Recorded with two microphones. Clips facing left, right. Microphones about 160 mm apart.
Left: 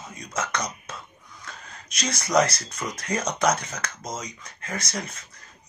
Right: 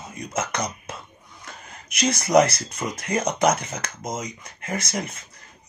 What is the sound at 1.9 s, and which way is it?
Speech, 25° right (ahead or behind).